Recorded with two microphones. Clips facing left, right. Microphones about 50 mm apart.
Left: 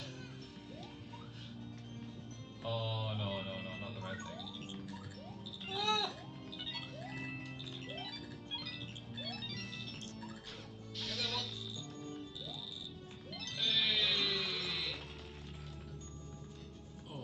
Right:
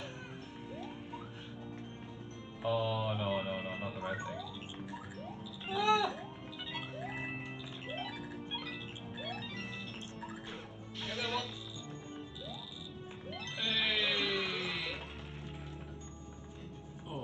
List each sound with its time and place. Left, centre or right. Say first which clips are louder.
2.6 s music: right 7 dB; right
4.0 s music: right 6 dB; centre
5.7 s a sound: right 6 dB; centre
6.7 s music: right 7 dB; centre
13.3 s music: right 1 dB; right